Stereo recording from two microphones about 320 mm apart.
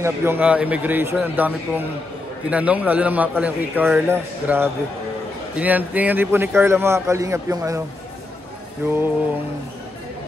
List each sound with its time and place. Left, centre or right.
0.0 s a man's voice: centre
8.8 s a man's voice: centre